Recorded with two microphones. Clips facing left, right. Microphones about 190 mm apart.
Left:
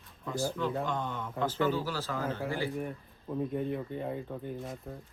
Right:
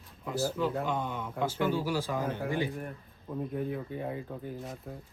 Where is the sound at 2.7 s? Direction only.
Centre (ahead or behind).